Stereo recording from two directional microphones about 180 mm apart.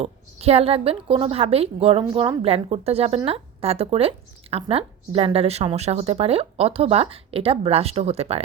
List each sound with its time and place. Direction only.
0.0 s a woman's voice: 35° right (ahead or behind)